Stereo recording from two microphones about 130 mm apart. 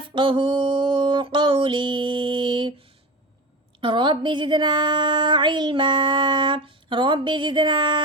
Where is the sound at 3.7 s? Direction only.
40° right (ahead or behind).